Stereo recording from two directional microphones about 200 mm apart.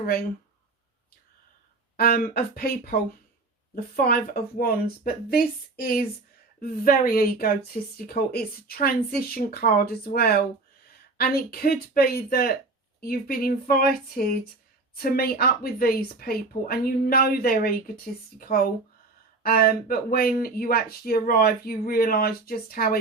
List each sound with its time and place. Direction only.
2.0 s speech: 50° left (ahead or behind)